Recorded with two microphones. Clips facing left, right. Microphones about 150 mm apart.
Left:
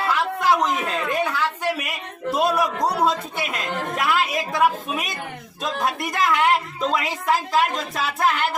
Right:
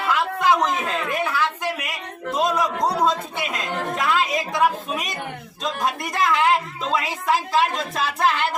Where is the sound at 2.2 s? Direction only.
10° left (ahead or behind).